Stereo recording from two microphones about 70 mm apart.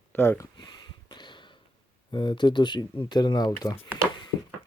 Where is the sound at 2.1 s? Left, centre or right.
Left.